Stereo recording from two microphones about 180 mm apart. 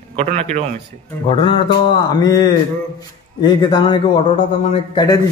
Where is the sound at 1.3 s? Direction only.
30° left (ahead or behind).